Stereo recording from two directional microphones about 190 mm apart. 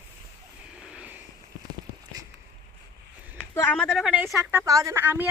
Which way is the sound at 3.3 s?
10° left (ahead or behind).